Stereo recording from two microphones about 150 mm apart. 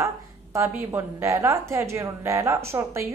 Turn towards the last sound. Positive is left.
turn(degrees=-20)  # may be behind; listen again after turning